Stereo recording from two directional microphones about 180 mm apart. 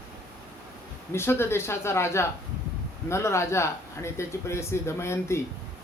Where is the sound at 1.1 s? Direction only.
15° left (ahead or behind).